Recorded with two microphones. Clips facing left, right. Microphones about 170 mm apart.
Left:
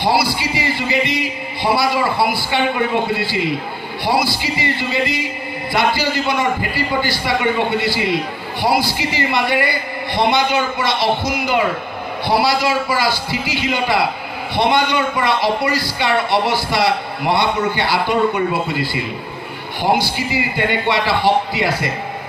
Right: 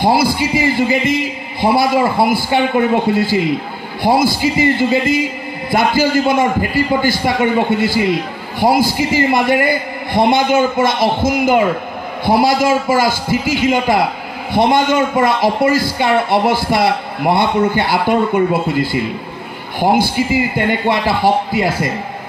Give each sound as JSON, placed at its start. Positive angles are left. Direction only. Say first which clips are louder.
{"t": 0.0, "sound": "a man's voice", "louder": "right 4 dB", "side_deg": -50}